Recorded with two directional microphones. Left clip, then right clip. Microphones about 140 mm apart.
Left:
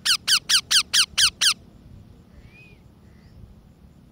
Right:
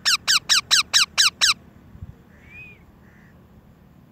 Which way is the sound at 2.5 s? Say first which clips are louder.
Right 9 dB; centre (ahead or behind).